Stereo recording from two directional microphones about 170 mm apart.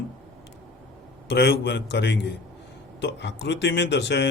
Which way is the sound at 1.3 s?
75° left (ahead or behind).